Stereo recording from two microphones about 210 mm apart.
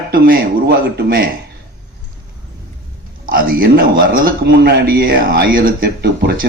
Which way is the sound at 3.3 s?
45° right (ahead or behind).